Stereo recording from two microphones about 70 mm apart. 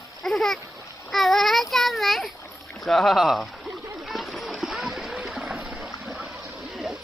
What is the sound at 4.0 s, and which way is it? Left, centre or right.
Splash, centre.